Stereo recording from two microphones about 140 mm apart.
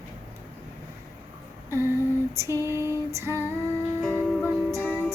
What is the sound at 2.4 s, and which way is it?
Female singing, 20° right (ahead or behind).